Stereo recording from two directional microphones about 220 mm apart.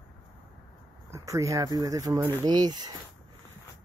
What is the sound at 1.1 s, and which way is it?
Speech, 15° right (ahead or behind).